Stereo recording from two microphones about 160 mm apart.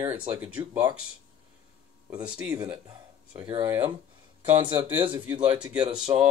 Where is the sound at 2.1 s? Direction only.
5° right (ahead or behind).